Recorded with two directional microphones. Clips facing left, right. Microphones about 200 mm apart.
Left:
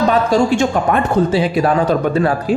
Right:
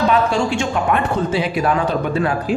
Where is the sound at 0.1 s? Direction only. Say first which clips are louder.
Left 4 dB; 40° left (ahead or behind).